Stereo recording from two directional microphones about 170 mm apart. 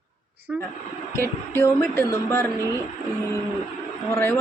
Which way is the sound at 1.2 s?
15° left (ahead or behind).